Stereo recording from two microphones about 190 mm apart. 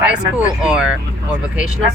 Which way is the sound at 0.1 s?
5° right (ahead or behind).